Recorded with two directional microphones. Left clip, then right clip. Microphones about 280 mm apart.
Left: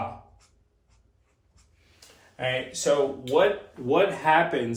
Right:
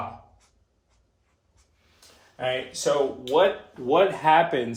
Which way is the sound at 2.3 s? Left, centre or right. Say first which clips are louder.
Right 1 dB; centre.